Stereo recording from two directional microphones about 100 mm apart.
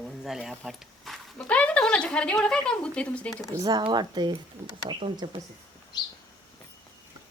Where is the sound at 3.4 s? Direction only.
35° right (ahead or behind); by 5.4 s 55° right (ahead or behind).